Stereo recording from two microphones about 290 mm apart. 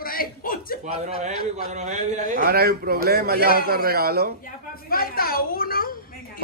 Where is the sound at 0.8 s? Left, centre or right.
Right.